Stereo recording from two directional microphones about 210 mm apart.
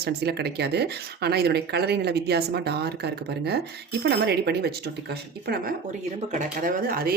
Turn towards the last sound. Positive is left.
turn(degrees=-45)  # may be behind; listen again after turning